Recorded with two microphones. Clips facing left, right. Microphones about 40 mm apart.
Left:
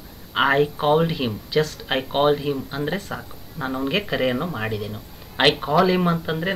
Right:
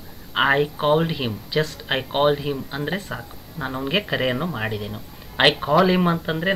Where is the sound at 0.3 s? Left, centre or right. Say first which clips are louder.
Even; centre.